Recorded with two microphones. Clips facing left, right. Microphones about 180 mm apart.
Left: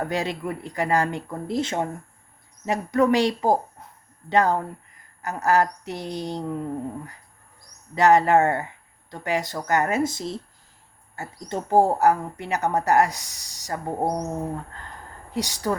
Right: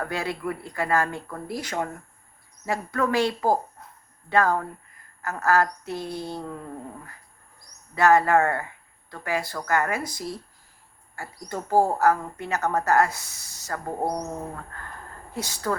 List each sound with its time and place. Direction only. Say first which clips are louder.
0.0 s a woman's voice: left 2 dB; 20° left (ahead or behind)
7.9 s a woman's voice: left 2 dB; 20° left (ahead or behind)